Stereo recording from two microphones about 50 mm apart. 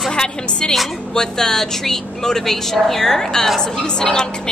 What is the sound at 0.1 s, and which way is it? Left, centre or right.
A woman's voice, centre.